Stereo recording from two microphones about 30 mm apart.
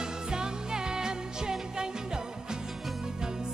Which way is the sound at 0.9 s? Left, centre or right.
Right.